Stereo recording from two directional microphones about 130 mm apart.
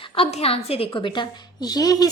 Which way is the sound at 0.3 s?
50° left (ahead or behind).